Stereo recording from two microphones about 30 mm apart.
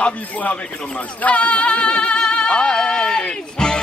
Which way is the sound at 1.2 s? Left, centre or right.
Left.